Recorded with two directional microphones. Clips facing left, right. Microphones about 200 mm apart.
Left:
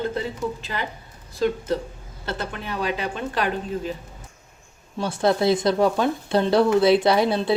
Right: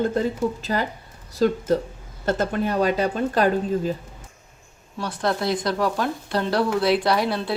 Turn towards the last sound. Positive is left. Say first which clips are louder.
# left 3 dB
turn(degrees=25)  # may be behind; listen again after turning